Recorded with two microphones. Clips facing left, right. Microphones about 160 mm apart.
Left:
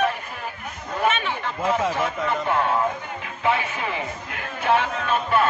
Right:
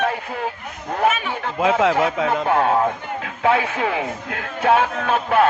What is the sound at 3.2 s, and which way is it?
Speech, 90° right.